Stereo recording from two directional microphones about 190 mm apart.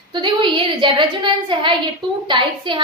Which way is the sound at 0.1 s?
25° right (ahead or behind).